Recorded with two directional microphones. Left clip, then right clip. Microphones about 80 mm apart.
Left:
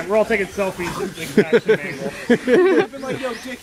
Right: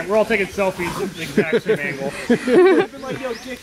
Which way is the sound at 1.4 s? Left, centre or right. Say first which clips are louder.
Left 3 dB; left.